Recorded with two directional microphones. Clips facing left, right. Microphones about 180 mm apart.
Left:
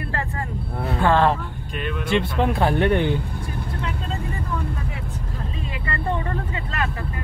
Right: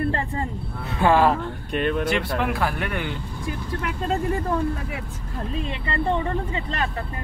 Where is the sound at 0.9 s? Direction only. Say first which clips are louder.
Right 1 dB; 15° right (ahead or behind).